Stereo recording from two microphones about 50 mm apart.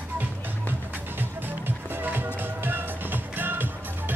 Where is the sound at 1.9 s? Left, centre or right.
Right.